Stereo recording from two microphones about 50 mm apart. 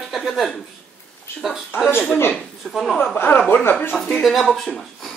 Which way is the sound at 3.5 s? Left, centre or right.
Left.